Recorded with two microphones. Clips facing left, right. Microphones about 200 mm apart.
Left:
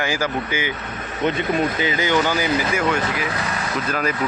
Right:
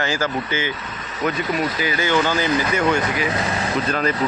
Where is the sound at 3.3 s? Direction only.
25° right (ahead or behind).